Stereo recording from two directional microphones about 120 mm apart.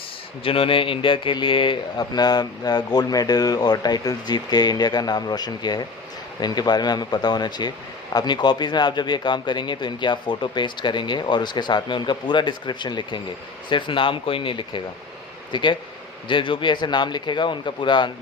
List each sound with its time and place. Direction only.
0.4 s speech: 50° left (ahead or behind)